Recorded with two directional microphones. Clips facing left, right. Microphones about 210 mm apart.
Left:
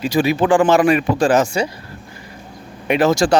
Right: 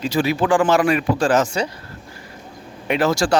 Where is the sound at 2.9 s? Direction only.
20° left (ahead or behind).